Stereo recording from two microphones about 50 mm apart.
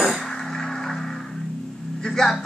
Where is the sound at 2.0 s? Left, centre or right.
Centre.